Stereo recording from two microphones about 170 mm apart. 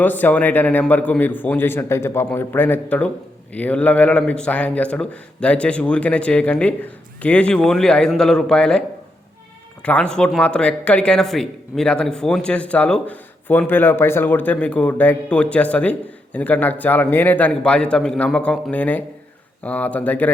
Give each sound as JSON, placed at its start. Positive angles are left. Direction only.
{"t": 0.0, "sound": "a man's voice", "side_deg": 10}
{"t": 9.8, "sound": "a man's voice", "side_deg": 10}